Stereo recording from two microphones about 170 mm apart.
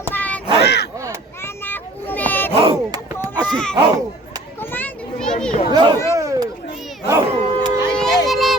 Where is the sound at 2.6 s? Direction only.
30° right (ahead or behind).